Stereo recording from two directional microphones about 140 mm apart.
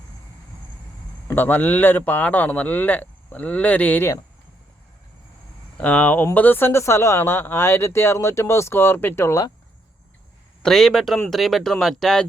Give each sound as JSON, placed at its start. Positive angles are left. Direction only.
{"t": 1.3, "sound": "speech", "side_deg": 15}
{"t": 5.7, "sound": "speech", "side_deg": 10}
{"t": 10.6, "sound": "speech", "side_deg": 5}